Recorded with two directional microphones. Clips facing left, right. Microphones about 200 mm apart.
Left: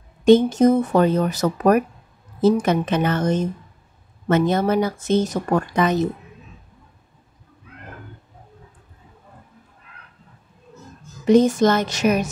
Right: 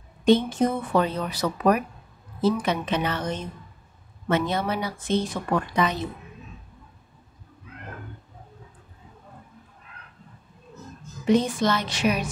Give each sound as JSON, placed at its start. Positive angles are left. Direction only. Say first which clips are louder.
{"t": 0.2, "sound": "speech", "louder": "left 6 dB", "side_deg": 45}
{"t": 11.2, "sound": "speech", "louder": "left 7 dB", "side_deg": 45}